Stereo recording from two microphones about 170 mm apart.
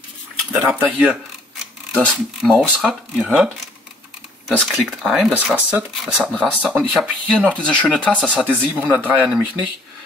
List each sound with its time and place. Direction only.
0.5 s speech: 10° right (ahead or behind)
4.5 s speech: centre (ahead or behind)
8.4 s speech: 10° right (ahead or behind)